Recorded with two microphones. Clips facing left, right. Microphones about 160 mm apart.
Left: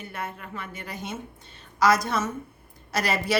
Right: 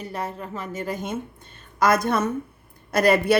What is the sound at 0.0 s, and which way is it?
A woman's voice, 35° right (ahead or behind).